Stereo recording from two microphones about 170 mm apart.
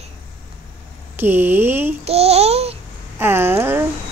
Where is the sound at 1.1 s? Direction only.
10° right (ahead or behind).